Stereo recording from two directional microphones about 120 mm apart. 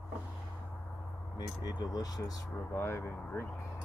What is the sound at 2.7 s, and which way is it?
Speech, 20° left (ahead or behind).